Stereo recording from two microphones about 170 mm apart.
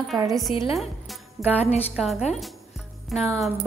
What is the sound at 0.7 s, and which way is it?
Music, centre (ahead or behind).